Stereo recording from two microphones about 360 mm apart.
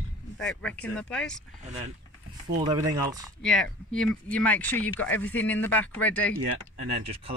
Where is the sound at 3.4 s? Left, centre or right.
Centre.